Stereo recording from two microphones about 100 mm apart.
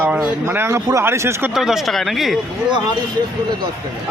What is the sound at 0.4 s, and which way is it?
A man's voice, 25° right (ahead or behind).